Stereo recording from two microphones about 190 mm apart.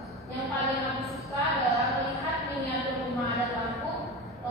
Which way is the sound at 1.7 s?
Centre (ahead or behind).